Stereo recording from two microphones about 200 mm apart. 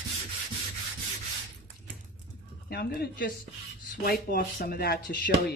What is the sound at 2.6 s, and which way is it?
Speech, 50° left (ahead or behind).